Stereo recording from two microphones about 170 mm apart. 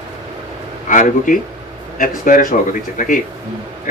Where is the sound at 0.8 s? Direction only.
50° left (ahead or behind).